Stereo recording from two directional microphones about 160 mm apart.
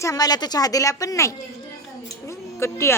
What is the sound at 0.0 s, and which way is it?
A woman's voice, 20° left (ahead or behind).